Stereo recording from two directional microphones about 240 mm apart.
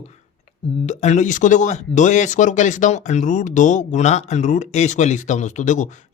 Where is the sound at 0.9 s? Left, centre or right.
Left.